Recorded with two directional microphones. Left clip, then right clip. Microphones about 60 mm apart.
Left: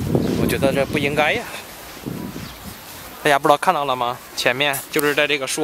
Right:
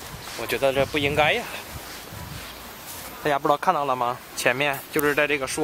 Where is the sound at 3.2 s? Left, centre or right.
Left.